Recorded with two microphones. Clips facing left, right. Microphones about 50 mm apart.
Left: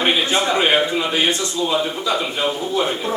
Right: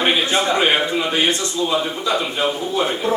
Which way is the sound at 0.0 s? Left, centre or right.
Centre.